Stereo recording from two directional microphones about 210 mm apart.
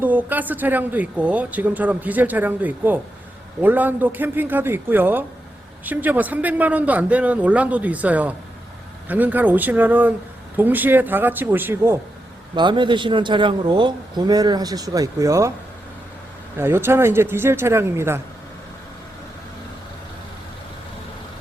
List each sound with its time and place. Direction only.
0.0 s speech: 10° right (ahead or behind)
12.5 s a man's voice: 20° right (ahead or behind)
16.6 s speech: 10° right (ahead or behind)